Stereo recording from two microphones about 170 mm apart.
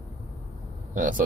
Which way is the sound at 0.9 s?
50° right (ahead or behind).